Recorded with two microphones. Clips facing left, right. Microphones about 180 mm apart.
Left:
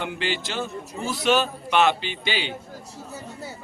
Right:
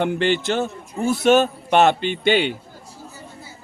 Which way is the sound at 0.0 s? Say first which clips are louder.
Right 8 dB; 50° right (ahead or behind).